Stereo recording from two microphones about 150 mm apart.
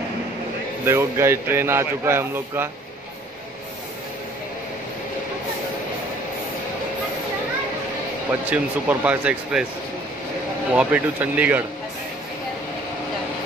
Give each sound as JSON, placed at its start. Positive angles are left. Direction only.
{"t": 0.8, "sound": "speech", "side_deg": -20}
{"t": 8.3, "sound": "speech", "side_deg": -10}
{"t": 10.7, "sound": "speech", "side_deg": -10}